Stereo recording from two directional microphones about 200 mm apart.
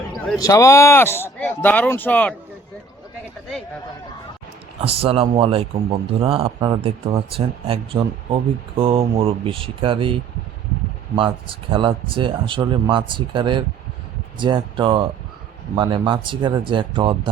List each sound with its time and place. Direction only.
0.3 s speech: 15° left (ahead or behind)
4.8 s speech: 30° right (ahead or behind)